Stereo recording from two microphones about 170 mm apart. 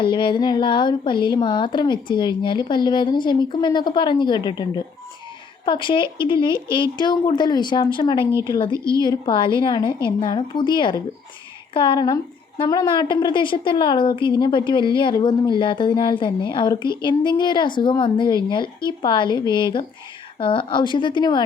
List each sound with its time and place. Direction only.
0.0 s a woman's voice: 30° left (ahead or behind)
8.2 s speech: 15° right (ahead or behind)
8.4 s a woman's voice: 25° left (ahead or behind)
8.7 s a woman's voice: 20° right (ahead or behind)
9.0 s a woman's voice: 25° left (ahead or behind)